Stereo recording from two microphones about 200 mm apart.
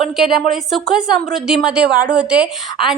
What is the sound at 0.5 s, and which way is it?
A woman's voice, centre (ahead or behind).